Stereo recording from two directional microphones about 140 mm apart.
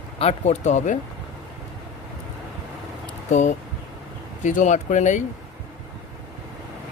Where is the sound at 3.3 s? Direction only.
60° left (ahead or behind).